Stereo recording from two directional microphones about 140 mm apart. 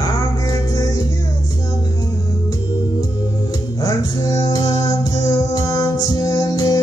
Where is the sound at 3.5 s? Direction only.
25° left (ahead or behind).